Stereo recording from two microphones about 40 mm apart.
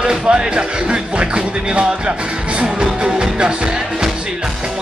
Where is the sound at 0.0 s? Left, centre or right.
Right.